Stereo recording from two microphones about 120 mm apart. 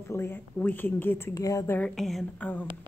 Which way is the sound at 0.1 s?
20° left (ahead or behind).